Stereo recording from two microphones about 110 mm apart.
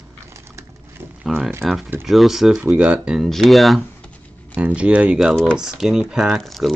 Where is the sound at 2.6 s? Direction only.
15° right (ahead or behind).